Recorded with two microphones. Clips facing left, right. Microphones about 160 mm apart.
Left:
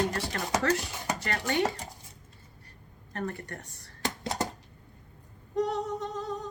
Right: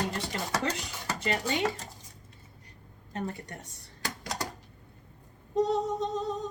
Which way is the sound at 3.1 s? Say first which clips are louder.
Left 1 dB; 20° right (ahead or behind).